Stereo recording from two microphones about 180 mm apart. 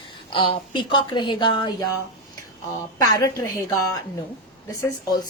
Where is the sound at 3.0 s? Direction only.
20° left (ahead or behind).